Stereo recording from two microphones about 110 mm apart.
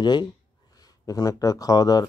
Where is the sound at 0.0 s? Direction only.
40° left (ahead or behind).